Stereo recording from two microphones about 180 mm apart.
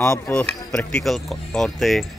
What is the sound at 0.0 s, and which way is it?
Speech, 15° left (ahead or behind).